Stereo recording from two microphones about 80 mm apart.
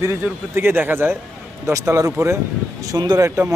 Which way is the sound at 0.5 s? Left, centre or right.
Right.